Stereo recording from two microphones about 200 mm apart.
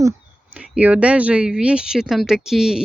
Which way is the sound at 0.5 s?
5° right (ahead or behind).